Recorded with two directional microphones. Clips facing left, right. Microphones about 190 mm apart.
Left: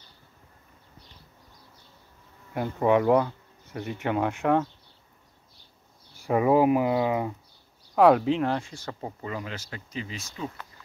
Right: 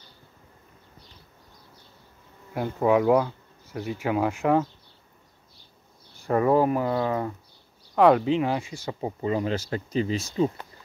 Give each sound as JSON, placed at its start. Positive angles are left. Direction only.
{"t": 2.5, "sound": "speech", "side_deg": 0}
{"t": 6.1, "sound": "speech", "side_deg": 10}
{"t": 9.2, "sound": "speech", "side_deg": -30}